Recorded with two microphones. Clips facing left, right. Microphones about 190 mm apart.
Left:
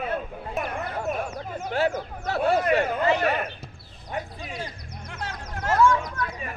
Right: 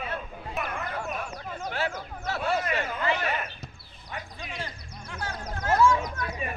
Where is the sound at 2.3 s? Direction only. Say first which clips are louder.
Left 7 dB; 55° left (ahead or behind).